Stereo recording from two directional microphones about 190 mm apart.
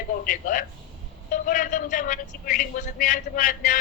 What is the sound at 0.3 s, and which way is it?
Speech, 45° left (ahead or behind).